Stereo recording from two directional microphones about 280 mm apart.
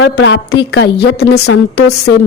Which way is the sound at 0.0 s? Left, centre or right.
Left.